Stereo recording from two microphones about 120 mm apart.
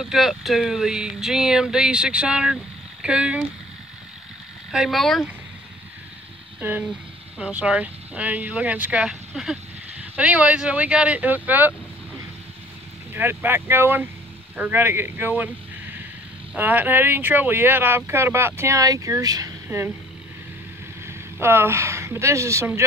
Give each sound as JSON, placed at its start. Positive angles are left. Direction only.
{"t": 0.0, "sound": "speech", "side_deg": 0}
{"t": 4.6, "sound": "speech", "side_deg": -5}
{"t": 6.6, "sound": "speech", "side_deg": -10}
{"t": 13.1, "sound": "speech", "side_deg": -15}
{"t": 16.5, "sound": "speech", "side_deg": -15}
{"t": 21.1, "sound": "speech", "side_deg": -20}